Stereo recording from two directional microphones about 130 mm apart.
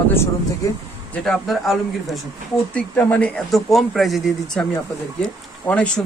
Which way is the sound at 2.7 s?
10° left (ahead or behind).